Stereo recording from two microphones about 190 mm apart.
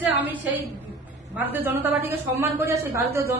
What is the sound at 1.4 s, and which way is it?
A woman's voice, 10° right (ahead or behind).